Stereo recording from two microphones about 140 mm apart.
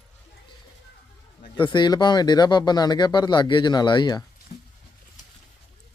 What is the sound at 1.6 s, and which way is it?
Speech, 35° left (ahead or behind).